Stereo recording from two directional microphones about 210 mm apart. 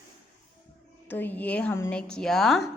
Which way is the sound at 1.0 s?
10° left (ahead or behind).